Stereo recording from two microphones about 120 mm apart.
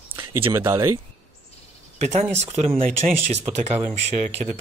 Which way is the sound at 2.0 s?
70° right (ahead or behind).